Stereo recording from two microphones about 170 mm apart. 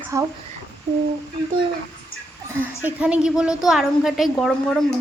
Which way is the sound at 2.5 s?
10° right (ahead or behind).